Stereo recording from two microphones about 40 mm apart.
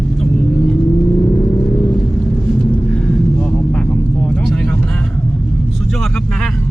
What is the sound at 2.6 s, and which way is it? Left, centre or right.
Vehicle, left.